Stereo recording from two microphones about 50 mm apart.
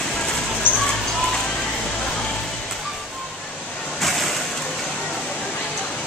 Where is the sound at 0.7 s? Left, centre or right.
Left.